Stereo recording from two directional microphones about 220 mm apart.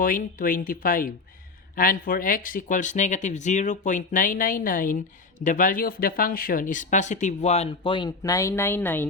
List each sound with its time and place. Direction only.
0.0 s speech: 40° left (ahead or behind); by 9.0 s 10° left (ahead or behind)